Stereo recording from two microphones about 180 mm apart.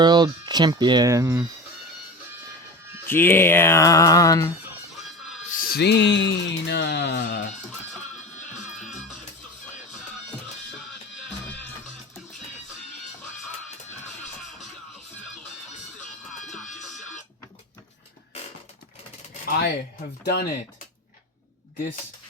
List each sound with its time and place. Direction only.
0.0 s speech: 25° right (ahead or behind)
3.1 s speech: 10° left (ahead or behind)
5.5 s music: 50° left (ahead or behind); by 7.3 s 80° left
8.8 s music: centre (ahead or behind)
16.4 s music: centre (ahead or behind)
20.2 s speech: 60° left (ahead or behind)